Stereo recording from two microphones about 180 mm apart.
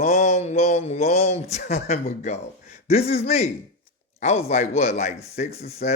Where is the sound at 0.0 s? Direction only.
40° left (ahead or behind).